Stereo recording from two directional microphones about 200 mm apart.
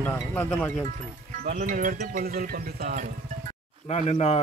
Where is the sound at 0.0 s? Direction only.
10° left (ahead or behind).